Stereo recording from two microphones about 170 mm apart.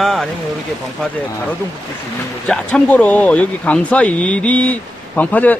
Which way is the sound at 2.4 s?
5° left (ahead or behind).